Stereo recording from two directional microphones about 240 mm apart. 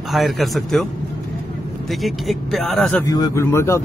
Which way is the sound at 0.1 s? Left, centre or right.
Centre.